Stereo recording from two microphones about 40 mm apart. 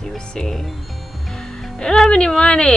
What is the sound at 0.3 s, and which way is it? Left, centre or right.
Speech, centre.